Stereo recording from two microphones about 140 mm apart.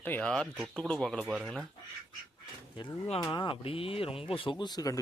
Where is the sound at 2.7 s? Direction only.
35° left (ahead or behind).